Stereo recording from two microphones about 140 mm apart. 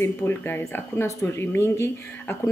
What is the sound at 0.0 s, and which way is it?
A woman's voice, 15° left (ahead or behind).